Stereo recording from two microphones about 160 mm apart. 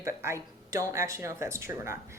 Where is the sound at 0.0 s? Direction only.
15° right (ahead or behind).